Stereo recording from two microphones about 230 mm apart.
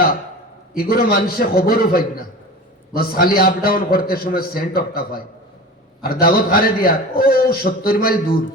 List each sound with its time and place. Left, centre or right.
0.7 s a man's voice: left